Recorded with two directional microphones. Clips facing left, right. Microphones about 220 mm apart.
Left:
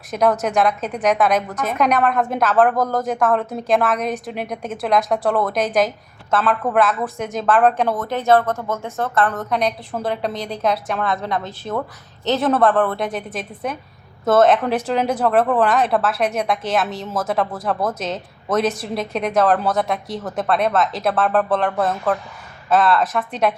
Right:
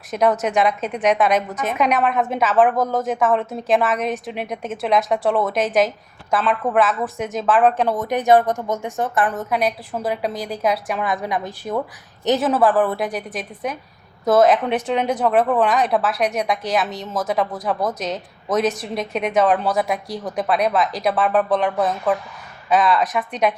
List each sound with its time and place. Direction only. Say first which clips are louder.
0.1 s a woman's voice: even; 5° right (ahead or behind)
7.9 s speech: right 1 dB; 15° right (ahead or behind)
9.3 s a woman's voice: even; 5° right (ahead or behind)
11.0 s speech: even; 15° right (ahead or behind)
12.4 s a woman's voice: left 2 dB; 5° right (ahead or behind)